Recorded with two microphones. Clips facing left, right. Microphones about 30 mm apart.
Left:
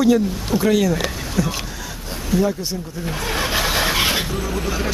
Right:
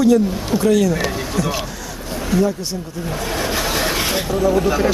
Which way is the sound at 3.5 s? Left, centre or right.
Centre.